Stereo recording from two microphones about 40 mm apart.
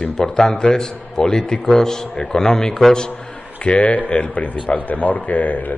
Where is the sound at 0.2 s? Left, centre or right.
Centre.